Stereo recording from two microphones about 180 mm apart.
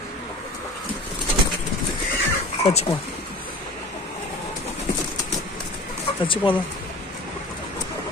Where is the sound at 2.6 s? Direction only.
35° left (ahead or behind).